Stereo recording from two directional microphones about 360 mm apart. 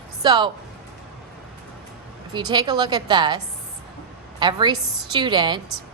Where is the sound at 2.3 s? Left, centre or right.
Centre.